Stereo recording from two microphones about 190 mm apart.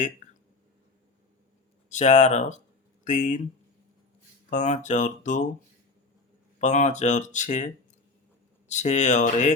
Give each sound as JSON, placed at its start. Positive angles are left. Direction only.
{"t": 1.9, "sound": "speech", "side_deg": 40}
{"t": 4.4, "sound": "speech", "side_deg": 40}
{"t": 6.6, "sound": "speech", "side_deg": 40}